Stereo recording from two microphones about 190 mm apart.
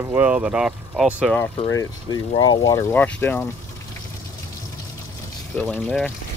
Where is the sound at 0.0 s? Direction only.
10° right (ahead or behind).